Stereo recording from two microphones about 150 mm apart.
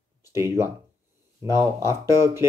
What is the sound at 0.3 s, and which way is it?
Speech, 15° right (ahead or behind).